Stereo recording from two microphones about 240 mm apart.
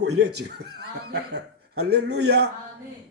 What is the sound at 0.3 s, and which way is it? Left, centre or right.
A man's voice, right.